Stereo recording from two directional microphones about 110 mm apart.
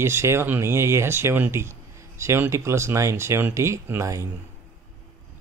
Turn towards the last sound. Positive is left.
turn(degrees=-25)  # may be behind; listen again after turning